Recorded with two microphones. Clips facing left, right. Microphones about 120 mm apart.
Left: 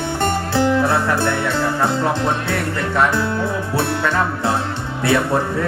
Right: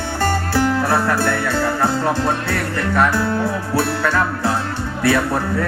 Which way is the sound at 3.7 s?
25° left (ahead or behind).